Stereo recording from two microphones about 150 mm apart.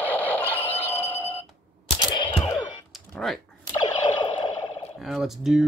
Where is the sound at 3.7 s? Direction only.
30° left (ahead or behind).